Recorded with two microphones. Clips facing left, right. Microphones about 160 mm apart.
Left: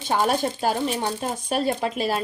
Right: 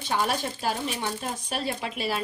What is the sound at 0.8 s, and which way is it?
A woman's voice, 35° left (ahead or behind).